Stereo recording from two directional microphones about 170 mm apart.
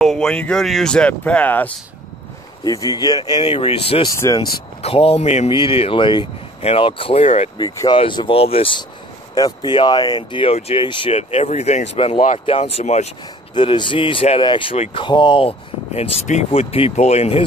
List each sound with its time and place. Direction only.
0.0 s speech: centre (ahead or behind)
2.6 s speech: 20° left (ahead or behind)
4.2 s speech: 20° left (ahead or behind)
4.8 s speech: 35° left (ahead or behind)
13.6 s speech: 30° left (ahead or behind)